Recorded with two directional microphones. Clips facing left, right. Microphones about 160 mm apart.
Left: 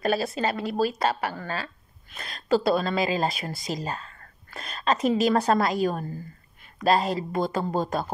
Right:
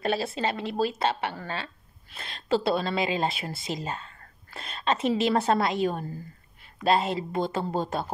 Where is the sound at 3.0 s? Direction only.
40° left (ahead or behind).